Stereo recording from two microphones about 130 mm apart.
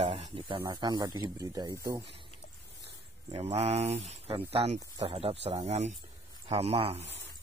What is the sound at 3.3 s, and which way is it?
Speech, 50° right (ahead or behind).